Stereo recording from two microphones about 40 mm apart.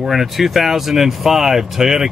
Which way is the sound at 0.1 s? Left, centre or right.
Centre.